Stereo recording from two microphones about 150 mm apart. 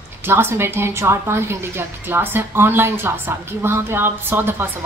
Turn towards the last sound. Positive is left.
turn(degrees=-15)  # may be behind; listen again after turning